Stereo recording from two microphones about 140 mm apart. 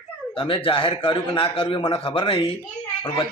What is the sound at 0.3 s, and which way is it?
A man's voice, 40° left (ahead or behind).